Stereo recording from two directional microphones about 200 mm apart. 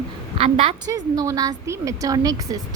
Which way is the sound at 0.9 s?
15° right (ahead or behind).